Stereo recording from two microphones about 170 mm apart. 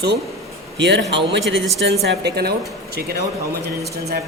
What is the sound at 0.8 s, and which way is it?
A man's voice, 90° right.